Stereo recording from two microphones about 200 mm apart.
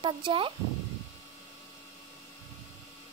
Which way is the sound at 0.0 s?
25° right (ahead or behind).